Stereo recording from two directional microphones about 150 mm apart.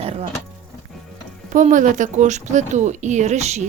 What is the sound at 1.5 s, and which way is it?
Speech, 60° right (ahead or behind).